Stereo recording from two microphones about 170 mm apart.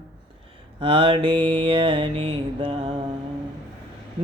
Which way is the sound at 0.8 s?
30° right (ahead or behind).